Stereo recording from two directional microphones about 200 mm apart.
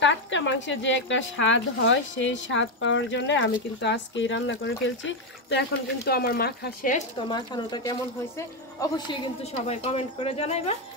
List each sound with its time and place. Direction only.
0.0 s a woman's voice: 65° left (ahead or behind)
6.0 s speech: 50° left (ahead or behind)
7.2 s a woman's voice: 20° left (ahead or behind)
8.9 s a woman's voice: 25° left (ahead or behind)